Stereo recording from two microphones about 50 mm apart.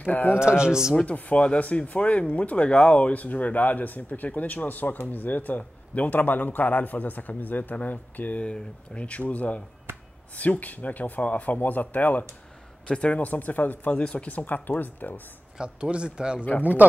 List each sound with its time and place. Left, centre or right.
0.0 s speech: left
0.4 s speech: centre
0.9 s speech: left
8.5 s speech: left
9.9 s a sound: right
10.3 s speech: left
12.8 s speech: left
15.5 s speech: right
16.3 s speech: left